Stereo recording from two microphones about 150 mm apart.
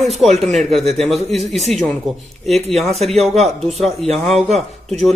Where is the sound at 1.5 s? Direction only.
45° right (ahead or behind).